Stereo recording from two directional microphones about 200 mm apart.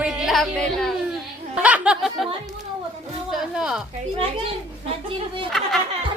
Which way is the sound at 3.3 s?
5° right (ahead or behind).